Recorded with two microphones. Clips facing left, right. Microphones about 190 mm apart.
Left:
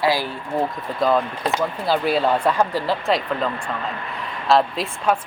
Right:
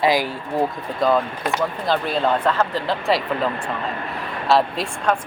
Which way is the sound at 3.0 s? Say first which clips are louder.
Right 1 dB; 5° right (ahead or behind).